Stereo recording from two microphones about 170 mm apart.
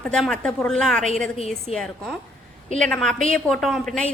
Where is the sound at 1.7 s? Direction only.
35° left (ahead or behind).